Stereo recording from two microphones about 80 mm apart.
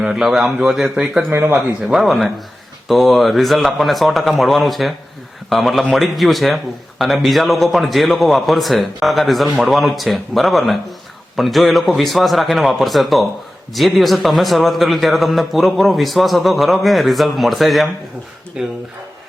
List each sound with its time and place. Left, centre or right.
0.0 s a man's voice: centre
1.3 s speech: right
1.5 s a man's voice: centre
18.6 s speech: centre